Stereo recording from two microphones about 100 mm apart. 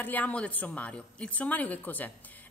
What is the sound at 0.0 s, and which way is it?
Speech, 15° left (ahead or behind).